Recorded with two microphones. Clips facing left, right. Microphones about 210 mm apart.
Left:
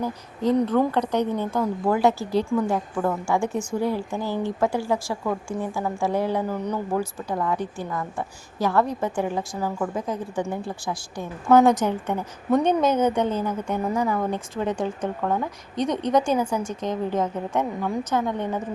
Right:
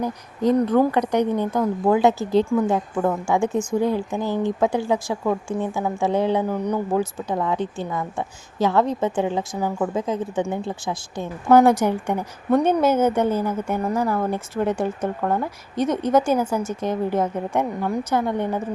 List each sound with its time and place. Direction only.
0.6 s a woman's voice: 10° right (ahead or behind)
11.4 s speech: 10° right (ahead or behind)
12.5 s speech: centre (ahead or behind)